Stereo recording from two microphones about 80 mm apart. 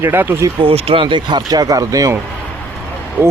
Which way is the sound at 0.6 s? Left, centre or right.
Right.